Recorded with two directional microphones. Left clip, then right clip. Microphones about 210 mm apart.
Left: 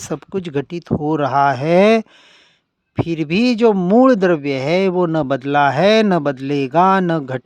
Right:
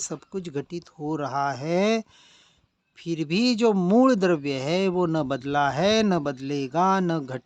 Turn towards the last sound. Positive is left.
turn(degrees=35)  # may be behind; listen again after turning